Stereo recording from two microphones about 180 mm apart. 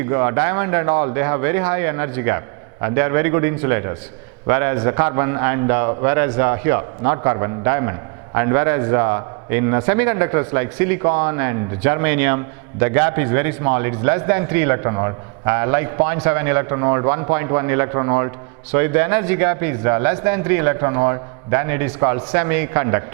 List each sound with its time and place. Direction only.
0.0 s a man's voice: 15° right (ahead or behind)